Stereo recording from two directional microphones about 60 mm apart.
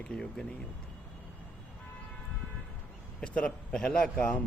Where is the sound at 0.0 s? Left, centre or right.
Centre.